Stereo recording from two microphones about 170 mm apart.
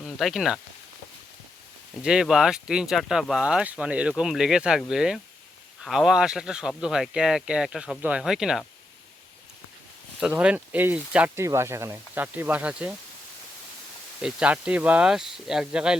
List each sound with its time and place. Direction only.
0.0 s speech: centre (ahead or behind)
2.0 s speech: 5° right (ahead or behind)
10.2 s speech: 5° right (ahead or behind)
14.2 s speech: 5° right (ahead or behind)